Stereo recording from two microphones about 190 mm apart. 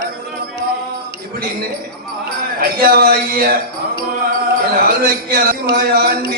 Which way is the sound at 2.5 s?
50° right (ahead or behind).